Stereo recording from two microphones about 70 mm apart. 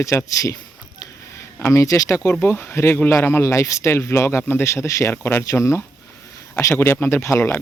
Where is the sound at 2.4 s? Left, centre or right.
Left.